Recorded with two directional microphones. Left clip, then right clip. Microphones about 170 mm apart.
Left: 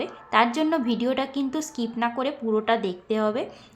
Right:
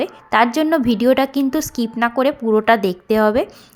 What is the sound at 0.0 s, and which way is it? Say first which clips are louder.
A woman's voice: right 6 dB; 35° right (ahead or behind).